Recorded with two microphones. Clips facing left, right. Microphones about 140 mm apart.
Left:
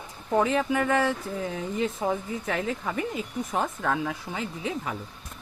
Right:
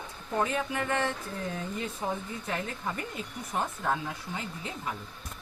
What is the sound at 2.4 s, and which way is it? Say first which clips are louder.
Speech: left 4 dB; 90° left.